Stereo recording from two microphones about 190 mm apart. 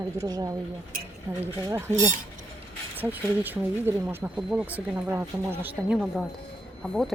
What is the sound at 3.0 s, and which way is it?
A woman's voice, 10° right (ahead or behind).